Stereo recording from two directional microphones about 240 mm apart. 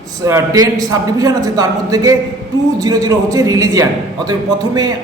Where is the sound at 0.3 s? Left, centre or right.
Centre.